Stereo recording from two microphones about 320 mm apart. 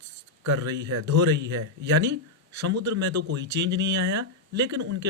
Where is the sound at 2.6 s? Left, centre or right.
Right.